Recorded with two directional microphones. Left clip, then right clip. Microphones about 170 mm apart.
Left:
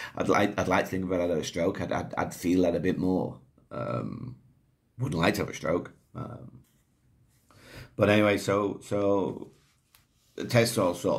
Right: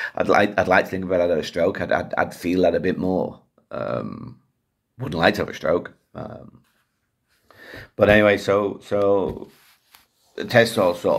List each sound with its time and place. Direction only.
0.0 s speech: 20° left (ahead or behind)
7.6 s speech: 15° left (ahead or behind)
10.3 s speech: 15° left (ahead or behind)